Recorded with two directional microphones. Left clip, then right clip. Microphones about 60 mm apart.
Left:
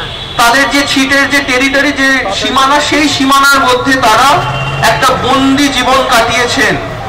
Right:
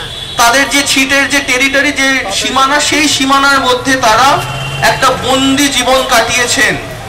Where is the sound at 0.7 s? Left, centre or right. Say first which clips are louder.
Left 1 dB; right.